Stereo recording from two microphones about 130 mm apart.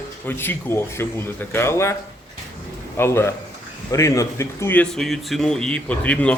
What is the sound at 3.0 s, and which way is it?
A man's voice, 20° left (ahead or behind).